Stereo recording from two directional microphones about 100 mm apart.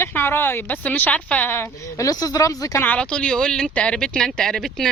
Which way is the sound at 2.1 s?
35° left (ahead or behind).